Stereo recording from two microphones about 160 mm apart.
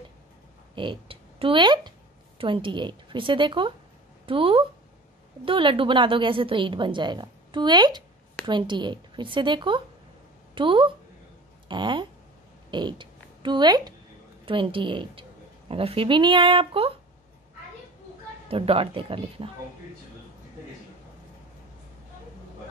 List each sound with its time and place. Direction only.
0.7 s a woman's voice: 35° right (ahead or behind)
18.5 s a woman's voice: 35° right (ahead or behind)